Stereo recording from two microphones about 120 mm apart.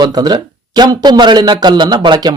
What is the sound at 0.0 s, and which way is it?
Speech, 35° right (ahead or behind).